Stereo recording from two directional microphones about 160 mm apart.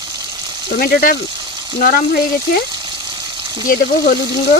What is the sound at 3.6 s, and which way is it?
Speech, 60° left (ahead or behind).